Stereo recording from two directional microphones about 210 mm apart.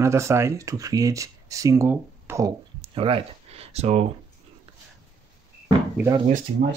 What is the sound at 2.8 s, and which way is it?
Speech, 25° right (ahead or behind).